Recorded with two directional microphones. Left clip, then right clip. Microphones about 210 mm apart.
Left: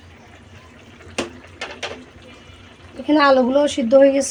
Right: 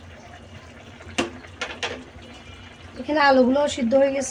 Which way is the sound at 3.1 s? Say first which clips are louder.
Left 3 dB; 35° left (ahead or behind).